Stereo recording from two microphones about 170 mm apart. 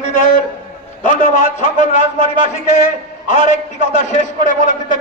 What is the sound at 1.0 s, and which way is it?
A man's voice, 50° left (ahead or behind).